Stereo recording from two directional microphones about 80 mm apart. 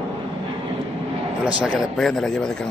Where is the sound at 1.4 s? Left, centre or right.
Centre.